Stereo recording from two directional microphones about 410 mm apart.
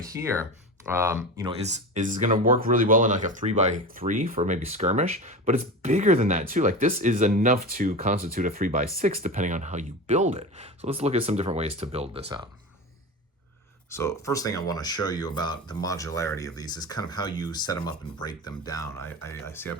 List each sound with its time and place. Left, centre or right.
0.0 s speech: centre
13.9 s speech: centre